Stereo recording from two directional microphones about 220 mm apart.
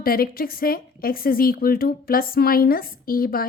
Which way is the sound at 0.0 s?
40° left (ahead or behind).